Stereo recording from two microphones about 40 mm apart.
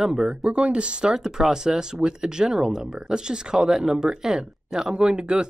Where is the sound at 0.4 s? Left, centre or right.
Right.